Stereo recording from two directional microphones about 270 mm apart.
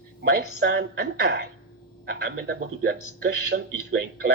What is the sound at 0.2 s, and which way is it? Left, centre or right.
A man's voice, right.